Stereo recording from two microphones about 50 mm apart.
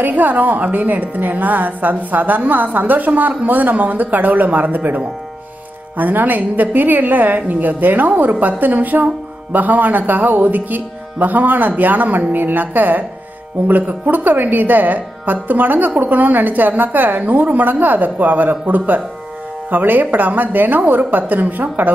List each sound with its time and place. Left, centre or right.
0.0 s a woman's voice: right